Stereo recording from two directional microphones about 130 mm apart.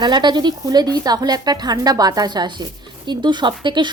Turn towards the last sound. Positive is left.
turn(degrees=-35)  # may be behind; listen again after turning